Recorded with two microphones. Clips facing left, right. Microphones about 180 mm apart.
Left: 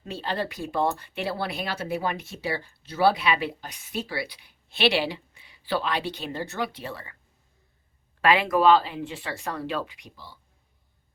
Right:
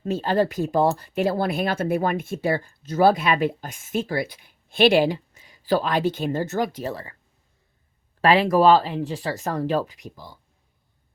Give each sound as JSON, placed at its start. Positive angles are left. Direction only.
{"t": 0.0, "sound": "speech", "side_deg": -45}
{"t": 8.2, "sound": "speech", "side_deg": -35}